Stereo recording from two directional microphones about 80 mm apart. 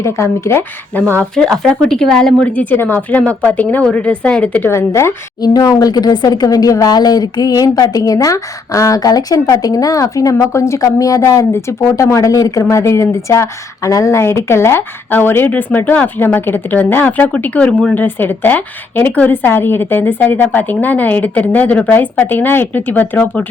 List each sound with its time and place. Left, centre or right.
0.0 s speech: left
1.0 s speech: right
1.4 s speech: centre
2.5 s speech: centre
4.7 s speech: left
5.4 s speech: left; by 17.9 s centre
17.9 s speech: left